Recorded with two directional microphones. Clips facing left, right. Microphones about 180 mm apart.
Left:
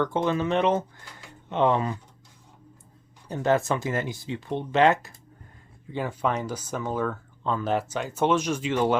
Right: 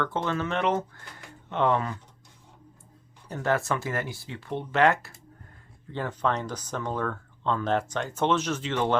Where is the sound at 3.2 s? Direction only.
20° left (ahead or behind).